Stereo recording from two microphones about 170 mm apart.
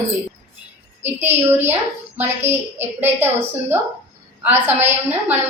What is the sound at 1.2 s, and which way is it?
A woman's voice, 15° right (ahead or behind).